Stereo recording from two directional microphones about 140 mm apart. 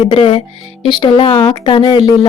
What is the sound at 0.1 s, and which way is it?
Speech, 35° left (ahead or behind).